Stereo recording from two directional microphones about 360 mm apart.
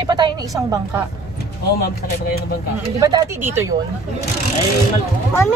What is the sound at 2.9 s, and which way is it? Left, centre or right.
Speech, centre.